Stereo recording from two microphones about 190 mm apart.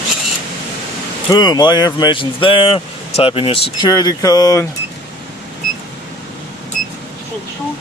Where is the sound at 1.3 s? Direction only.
20° left (ahead or behind).